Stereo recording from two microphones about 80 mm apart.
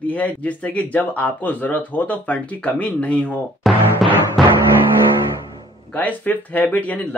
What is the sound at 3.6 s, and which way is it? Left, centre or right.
Speech, centre.